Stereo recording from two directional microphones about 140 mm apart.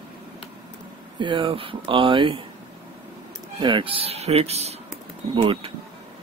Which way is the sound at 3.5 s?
35° right (ahead or behind).